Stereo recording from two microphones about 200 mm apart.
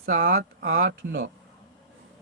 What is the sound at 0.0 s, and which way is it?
Speech, 45° right (ahead or behind).